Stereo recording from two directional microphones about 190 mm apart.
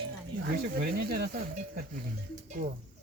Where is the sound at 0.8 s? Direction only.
55° right (ahead or behind).